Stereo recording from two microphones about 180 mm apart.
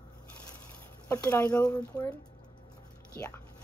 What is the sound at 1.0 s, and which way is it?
Speech, 20° left (ahead or behind).